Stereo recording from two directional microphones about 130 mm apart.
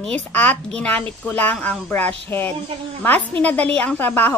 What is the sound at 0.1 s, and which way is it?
Speech, 10° left (ahead or behind).